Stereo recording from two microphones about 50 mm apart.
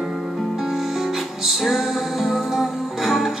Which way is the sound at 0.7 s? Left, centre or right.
Centre.